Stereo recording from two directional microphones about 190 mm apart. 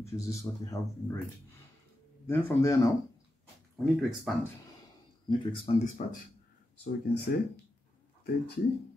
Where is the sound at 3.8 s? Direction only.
Centre (ahead or behind).